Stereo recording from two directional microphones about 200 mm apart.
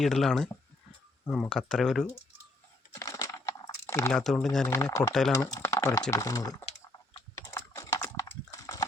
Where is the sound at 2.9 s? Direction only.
15° left (ahead or behind).